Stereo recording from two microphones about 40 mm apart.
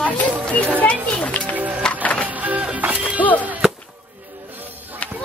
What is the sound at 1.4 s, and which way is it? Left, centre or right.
Music, right.